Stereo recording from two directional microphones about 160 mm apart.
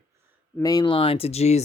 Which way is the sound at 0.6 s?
25° left (ahead or behind).